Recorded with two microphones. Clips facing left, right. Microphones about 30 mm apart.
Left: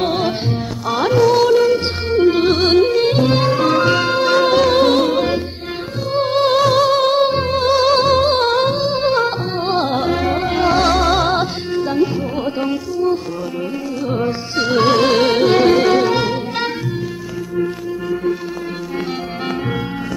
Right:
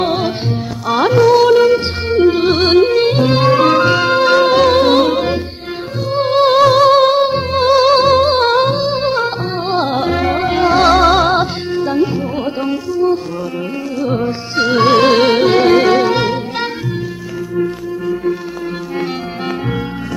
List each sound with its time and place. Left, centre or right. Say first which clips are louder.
0.0 s music: right 2 dB; centre
2.1 s music: right 2 dB; centre
3.5 s music: right 4 dB; right
3.8 s music: right 3 dB; centre
7.2 s music: right 2 dB; centre
14.5 s music: right 4 dB; centre